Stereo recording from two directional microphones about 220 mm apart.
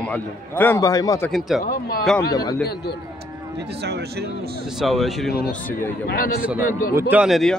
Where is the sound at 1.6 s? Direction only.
40° left (ahead or behind).